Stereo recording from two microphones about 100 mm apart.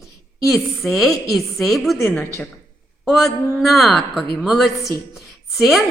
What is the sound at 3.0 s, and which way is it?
A woman's voice, centre (ahead or behind).